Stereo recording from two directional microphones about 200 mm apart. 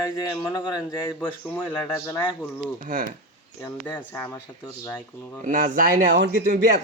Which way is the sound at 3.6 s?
15° left (ahead or behind).